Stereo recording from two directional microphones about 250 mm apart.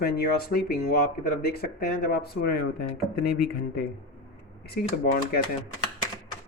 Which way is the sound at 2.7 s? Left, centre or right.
Left.